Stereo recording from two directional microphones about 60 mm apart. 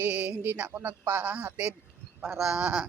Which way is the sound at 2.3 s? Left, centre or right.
Centre.